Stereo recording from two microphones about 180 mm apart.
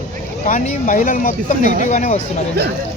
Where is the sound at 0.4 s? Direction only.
45° left (ahead or behind).